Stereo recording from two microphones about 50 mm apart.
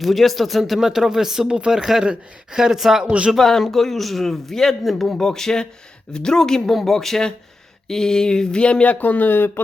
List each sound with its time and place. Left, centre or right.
0.0 s speech: centre
3.0 s speech: centre
3.3 s speech: centre; by 9.5 s left